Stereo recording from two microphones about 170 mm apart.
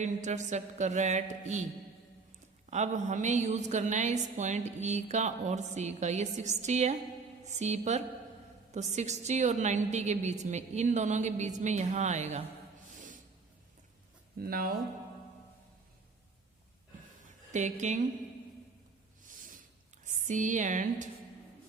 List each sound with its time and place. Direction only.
0.0 s a woman's voice: 45° right (ahead or behind)
2.6 s a woman's voice: 45° right (ahead or behind)
14.3 s speech: 60° right (ahead or behind)
17.5 s a woman's voice: 45° right (ahead or behind)
19.4 s a sound: 50° right (ahead or behind)
20.1 s speech: 45° right (ahead or behind)